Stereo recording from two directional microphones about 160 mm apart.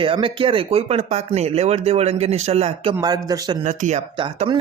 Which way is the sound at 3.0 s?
25° right (ahead or behind).